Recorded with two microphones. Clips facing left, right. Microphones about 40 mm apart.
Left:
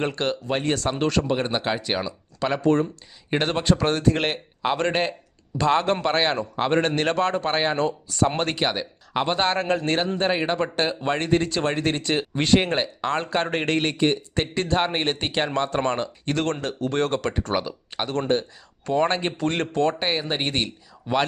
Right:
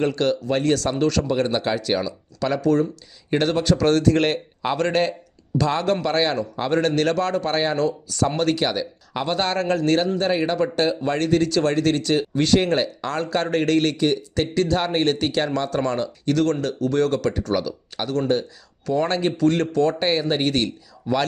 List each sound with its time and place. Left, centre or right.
0.0 s speech: left
20.0 s speech: centre